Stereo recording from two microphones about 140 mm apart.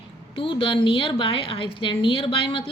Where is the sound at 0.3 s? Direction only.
35° left (ahead or behind).